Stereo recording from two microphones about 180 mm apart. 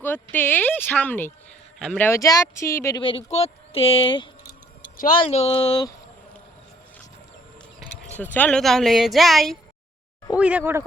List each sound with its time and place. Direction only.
0.0 s speech: 10° left (ahead or behind)
3.0 s speech: 30° left (ahead or behind)
8.1 s speech: 10° left (ahead or behind); by 10.8 s 15° right (ahead or behind)